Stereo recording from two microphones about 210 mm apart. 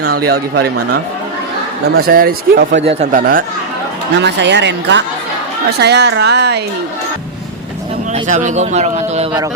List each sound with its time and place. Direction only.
0.0 s speech: 50° right (ahead or behind)
2.0 s speech: 45° right (ahead or behind)
2.8 s a man's voice: 30° right (ahead or behind)
4.2 s speech: 55° right (ahead or behind)
8.1 s a man's voice: 35° right (ahead or behind)